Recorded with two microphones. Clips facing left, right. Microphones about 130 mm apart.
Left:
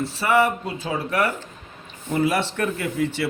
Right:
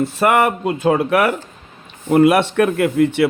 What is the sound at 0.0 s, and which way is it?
Speech, 55° right (ahead or behind).